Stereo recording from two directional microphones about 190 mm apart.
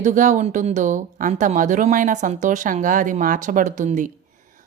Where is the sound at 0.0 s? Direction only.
40° right (ahead or behind).